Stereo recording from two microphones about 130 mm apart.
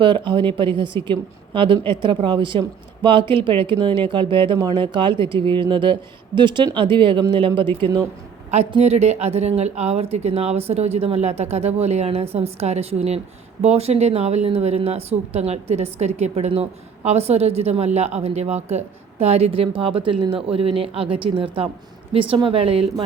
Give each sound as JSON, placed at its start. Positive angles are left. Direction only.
{"t": 0.0, "sound": "speech", "side_deg": -40}
{"t": 8.8, "sound": "speech", "side_deg": -55}